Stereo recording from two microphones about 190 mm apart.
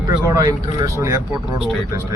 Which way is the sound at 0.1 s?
20° right (ahead or behind).